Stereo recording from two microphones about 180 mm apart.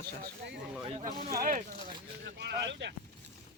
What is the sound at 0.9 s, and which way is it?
Speech, 40° right (ahead or behind).